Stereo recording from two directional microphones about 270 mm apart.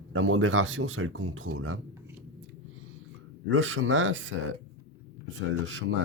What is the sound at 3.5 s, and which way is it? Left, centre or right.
Speech, right.